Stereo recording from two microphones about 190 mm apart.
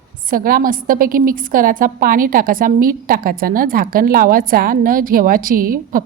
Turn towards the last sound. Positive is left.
turn(degrees=-50)  # may be behind; listen again after turning